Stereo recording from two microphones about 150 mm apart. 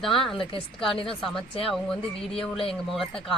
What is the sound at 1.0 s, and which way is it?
Speech, centre (ahead or behind).